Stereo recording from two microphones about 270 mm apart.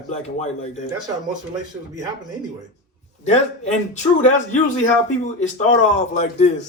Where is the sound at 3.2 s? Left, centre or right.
Left.